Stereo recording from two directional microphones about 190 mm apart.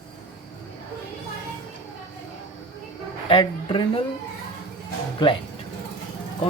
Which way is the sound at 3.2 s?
25° left (ahead or behind).